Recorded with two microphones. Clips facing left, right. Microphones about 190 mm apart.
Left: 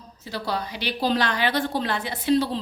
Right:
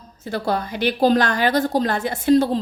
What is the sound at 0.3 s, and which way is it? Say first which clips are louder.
A woman's voice: right 6 dB; 50° right (ahead or behind).